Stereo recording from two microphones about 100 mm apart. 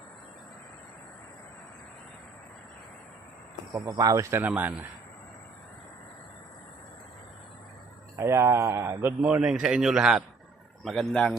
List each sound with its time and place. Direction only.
3.9 s speech: 35° right (ahead or behind)
4.4 s a man's voice: 15° right (ahead or behind)
8.2 s speech: 30° right (ahead or behind)
9.2 s a man's voice: 10° right (ahead or behind); by 11.3 s 5° left (ahead or behind)